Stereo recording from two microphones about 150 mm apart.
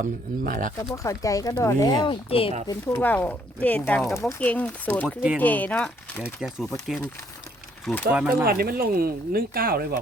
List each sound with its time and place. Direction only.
0.0 s speech: 65° right (ahead or behind)
0.9 s speech: 20° left (ahead or behind)
2.6 s speech: 15° left (ahead or behind)
5.0 s speech: 5° right (ahead or behind)
5.4 s speech: 10° left (ahead or behind)
8.1 s speech: 10° right (ahead or behind)
8.4 s speech: 90° right